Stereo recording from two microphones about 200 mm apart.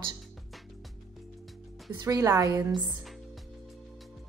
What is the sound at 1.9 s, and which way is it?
A woman's voice, 15° right (ahead or behind).